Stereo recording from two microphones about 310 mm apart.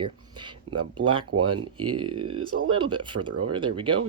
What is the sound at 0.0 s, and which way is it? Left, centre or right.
Speech, centre.